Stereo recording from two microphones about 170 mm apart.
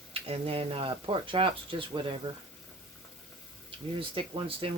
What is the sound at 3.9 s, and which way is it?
Speech, 30° right (ahead or behind).